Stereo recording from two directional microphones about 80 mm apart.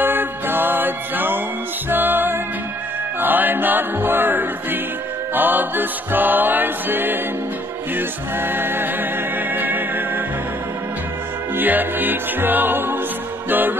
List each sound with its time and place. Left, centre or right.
0.0 s music: right
11.5 s music: right